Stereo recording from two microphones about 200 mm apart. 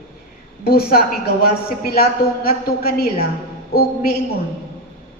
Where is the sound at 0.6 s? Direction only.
50° left (ahead or behind).